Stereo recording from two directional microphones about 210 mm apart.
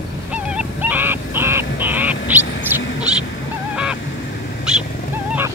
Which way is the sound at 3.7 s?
5° right (ahead or behind).